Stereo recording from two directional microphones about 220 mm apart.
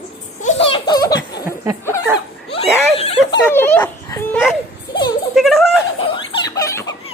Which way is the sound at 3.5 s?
10° left (ahead or behind).